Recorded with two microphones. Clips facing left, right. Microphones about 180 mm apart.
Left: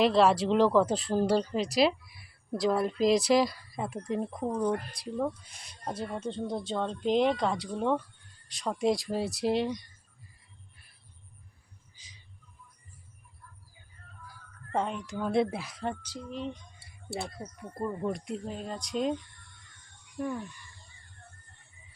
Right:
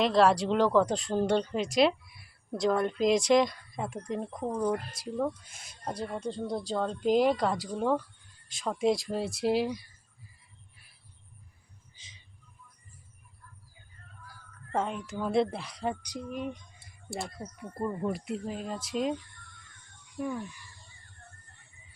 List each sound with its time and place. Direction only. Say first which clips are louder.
0.0 s speech: even; centre (ahead or behind)
11.9 s a sound: even; 25° right (ahead or behind)
14.7 s speech: even; centre (ahead or behind)
16.0 s speech: right 1 dB; 15° right (ahead or behind)